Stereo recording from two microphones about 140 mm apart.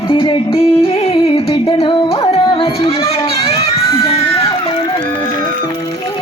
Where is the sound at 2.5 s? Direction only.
45° left (ahead or behind).